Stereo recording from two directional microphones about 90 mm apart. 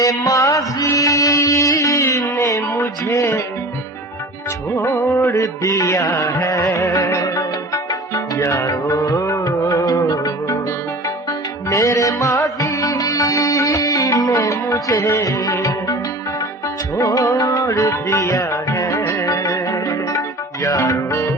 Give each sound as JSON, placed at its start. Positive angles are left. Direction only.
{"t": 0.0, "sound": "music", "side_deg": 40}
{"t": 4.7, "sound": "music", "side_deg": 30}
{"t": 5.3, "sound": "music", "side_deg": 35}